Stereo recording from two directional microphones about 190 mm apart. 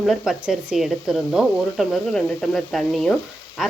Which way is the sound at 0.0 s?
Centre (ahead or behind).